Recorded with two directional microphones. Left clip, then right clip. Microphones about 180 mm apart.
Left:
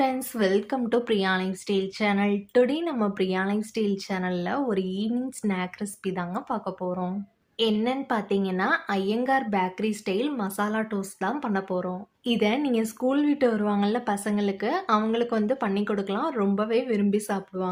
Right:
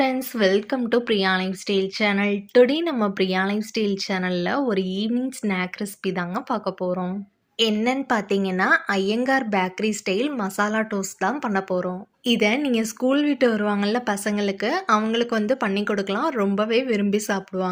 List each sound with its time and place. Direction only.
0.0 s a woman's voice: 15° right (ahead or behind)